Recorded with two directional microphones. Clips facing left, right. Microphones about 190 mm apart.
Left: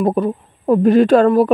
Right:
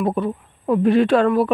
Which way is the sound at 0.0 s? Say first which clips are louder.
Left 4 dB; 40° left (ahead or behind).